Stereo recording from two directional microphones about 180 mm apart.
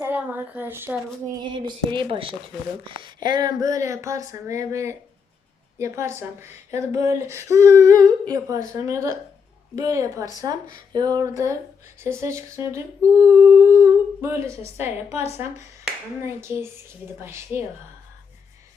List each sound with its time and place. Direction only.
0.0 s speech: 10° right (ahead or behind)
1.4 s a woman's voice: 25° right (ahead or behind)
16.2 s speech: 15° right (ahead or behind)